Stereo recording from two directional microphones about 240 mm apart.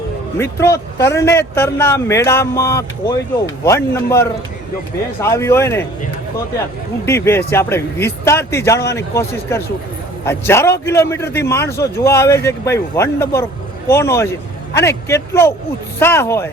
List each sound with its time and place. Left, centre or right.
0.3 s speech: centre
7.0 s speech: centre